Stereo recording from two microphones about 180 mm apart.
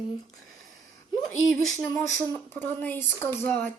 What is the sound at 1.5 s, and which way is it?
Speech, centre (ahead or behind).